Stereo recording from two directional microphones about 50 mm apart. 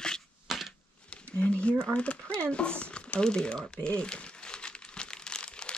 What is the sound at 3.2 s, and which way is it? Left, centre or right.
Crumpling, centre.